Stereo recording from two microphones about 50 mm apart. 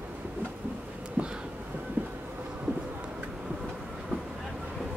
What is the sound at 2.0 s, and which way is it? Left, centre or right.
Train, right.